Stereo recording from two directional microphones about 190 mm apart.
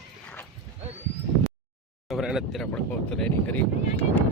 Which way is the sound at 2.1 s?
Centre (ahead or behind).